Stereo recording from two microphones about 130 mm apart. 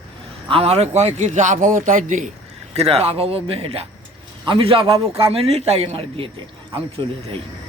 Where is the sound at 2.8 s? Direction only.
50° right (ahead or behind).